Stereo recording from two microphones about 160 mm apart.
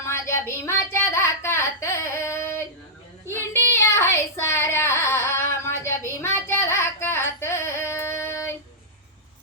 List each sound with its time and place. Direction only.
0.1 s child singing: 15° left (ahead or behind)